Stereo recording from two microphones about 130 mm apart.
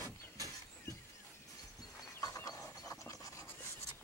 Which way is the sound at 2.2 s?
25° left (ahead or behind).